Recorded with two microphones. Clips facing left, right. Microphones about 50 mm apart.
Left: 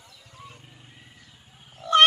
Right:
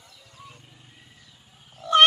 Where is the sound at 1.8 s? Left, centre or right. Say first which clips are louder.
Even; centre.